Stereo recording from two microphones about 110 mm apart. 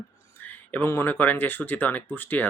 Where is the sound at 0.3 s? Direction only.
15° left (ahead or behind).